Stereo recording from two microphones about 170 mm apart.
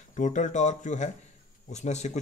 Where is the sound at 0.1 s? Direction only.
45° left (ahead or behind).